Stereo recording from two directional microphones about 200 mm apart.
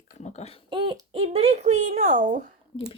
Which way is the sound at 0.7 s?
25° right (ahead or behind).